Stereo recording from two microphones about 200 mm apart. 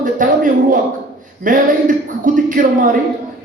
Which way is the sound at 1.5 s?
40° right (ahead or behind).